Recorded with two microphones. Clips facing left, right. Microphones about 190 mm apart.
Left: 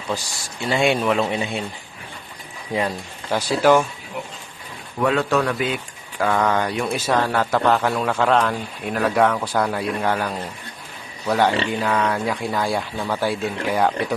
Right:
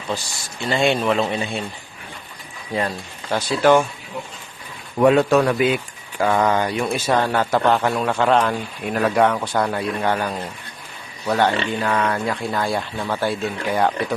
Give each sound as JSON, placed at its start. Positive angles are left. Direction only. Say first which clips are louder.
{"t": 0.7, "sound": "speech", "louder": "even", "side_deg": 10}
{"t": 2.7, "sound": "speech", "louder": "even", "side_deg": 10}
{"t": 4.9, "sound": "a man's voice", "louder": "right 5 dB", "side_deg": -20}